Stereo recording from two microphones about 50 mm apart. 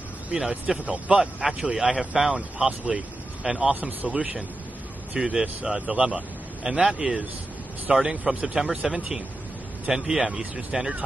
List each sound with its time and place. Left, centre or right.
0.4 s a man's voice: centre
1.6 s a man's voice: centre
2.3 s a man's voice: right
6.7 s a man's voice: centre